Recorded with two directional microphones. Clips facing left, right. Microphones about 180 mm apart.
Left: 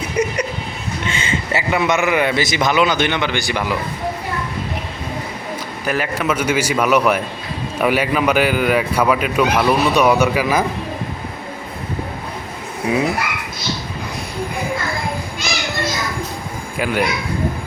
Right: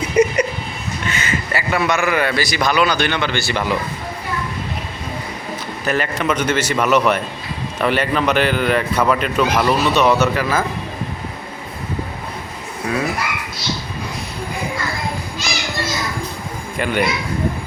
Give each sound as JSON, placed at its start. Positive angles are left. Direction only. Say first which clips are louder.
{"t": 0.2, "sound": "a sound", "louder": "right 5 dB", "side_deg": -10}
{"t": 1.0, "sound": "a man's voice", "louder": "even", "side_deg": 25}
{"t": 5.8, "sound": "a man's voice", "louder": "right 1 dB", "side_deg": 5}
{"t": 12.9, "sound": "a man's voice", "louder": "left 4 dB", "side_deg": 15}
{"t": 16.7, "sound": "a man's voice", "louder": "even", "side_deg": 5}